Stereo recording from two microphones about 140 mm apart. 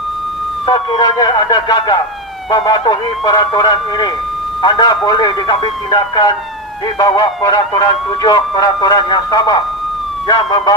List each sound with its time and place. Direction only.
0.7 s speech: 30° left (ahead or behind)